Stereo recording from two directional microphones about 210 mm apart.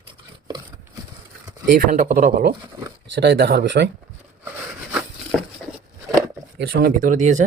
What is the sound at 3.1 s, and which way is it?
Speech, 55° right (ahead or behind).